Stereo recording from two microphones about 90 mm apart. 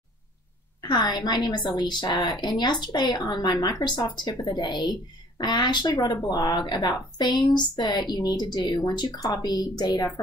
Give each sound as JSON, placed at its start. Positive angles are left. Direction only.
{"t": 0.7, "sound": "a woman's voice", "side_deg": 55}